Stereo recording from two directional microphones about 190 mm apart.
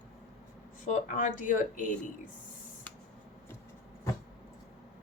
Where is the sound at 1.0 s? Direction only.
45° left (ahead or behind).